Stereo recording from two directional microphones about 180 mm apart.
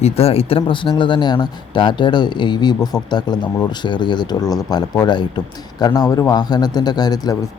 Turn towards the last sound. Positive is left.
turn(degrees=20)  # may be behind; listen again after turning